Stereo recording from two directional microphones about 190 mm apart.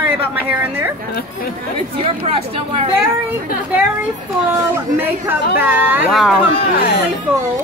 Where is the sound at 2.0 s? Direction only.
30° right (ahead or behind).